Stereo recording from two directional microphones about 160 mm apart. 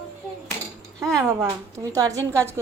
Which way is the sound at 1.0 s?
20° right (ahead or behind).